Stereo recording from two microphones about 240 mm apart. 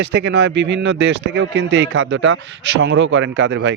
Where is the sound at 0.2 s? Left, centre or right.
Right.